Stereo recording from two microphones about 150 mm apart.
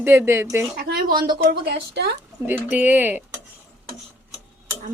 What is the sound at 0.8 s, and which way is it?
Speech, 90° right.